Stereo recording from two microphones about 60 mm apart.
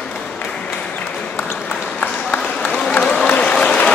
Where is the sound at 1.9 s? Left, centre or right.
Left.